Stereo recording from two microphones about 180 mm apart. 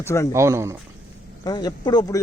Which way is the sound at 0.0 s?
15° left (ahead or behind).